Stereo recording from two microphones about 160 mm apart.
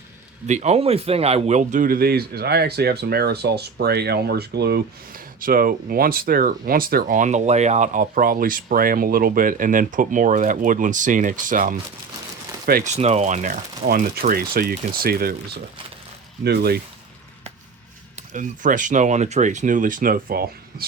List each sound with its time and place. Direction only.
0.4 s speech: 45° right (ahead or behind)
12.8 s speech: 45° right (ahead or behind); by 16.8 s 80° right
18.2 s speech: 55° right (ahead or behind); by 20.8 s 70° right (ahead or behind)